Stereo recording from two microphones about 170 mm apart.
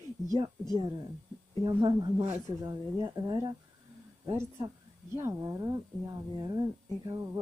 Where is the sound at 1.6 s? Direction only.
25° right (ahead or behind).